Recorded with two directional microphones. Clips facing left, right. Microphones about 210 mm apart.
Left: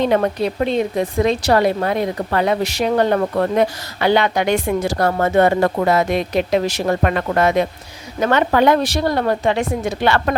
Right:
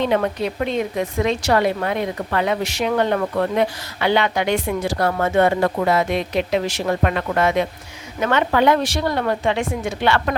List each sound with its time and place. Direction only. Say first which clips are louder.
0.0 s a woman's voice: left 3 dB; 40° left (ahead or behind)